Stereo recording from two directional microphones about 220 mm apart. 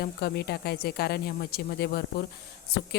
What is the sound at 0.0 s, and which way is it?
A woman's voice, 45° left (ahead or behind).